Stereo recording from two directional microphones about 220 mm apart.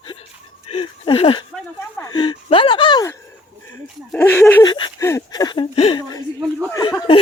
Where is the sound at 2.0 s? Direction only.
20° left (ahead or behind).